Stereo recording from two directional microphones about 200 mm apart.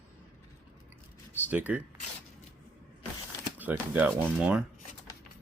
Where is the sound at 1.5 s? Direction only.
10° right (ahead or behind).